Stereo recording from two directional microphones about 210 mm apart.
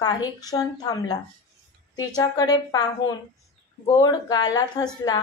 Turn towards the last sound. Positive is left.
turn(degrees=20)  # may be behind; listen again after turning